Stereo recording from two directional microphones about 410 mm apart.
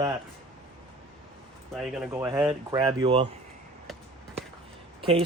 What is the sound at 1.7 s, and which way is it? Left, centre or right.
Speech, centre.